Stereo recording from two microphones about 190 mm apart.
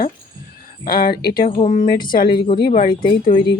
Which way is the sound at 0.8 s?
50° left (ahead or behind).